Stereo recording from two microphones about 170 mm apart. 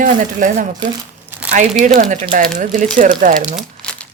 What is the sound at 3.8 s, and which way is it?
Crumpling, 5° left (ahead or behind).